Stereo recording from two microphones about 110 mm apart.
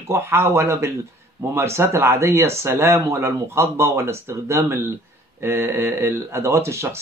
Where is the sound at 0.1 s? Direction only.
25° right (ahead or behind).